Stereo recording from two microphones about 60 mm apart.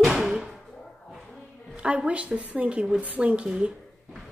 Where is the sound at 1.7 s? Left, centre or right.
Centre.